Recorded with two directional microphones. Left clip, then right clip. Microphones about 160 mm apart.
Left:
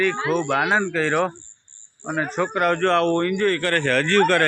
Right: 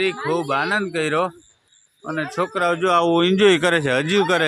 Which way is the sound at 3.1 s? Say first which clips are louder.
Right 6 dB; 60° right (ahead or behind).